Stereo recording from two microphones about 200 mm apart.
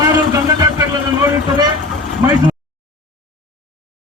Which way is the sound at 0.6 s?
15° right (ahead or behind).